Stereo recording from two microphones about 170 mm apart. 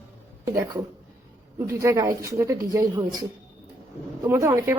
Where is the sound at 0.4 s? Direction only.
20° right (ahead or behind).